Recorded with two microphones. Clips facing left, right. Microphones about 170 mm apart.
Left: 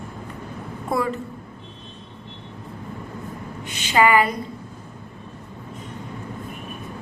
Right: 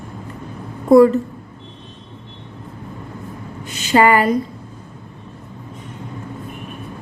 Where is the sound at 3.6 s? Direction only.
40° right (ahead or behind).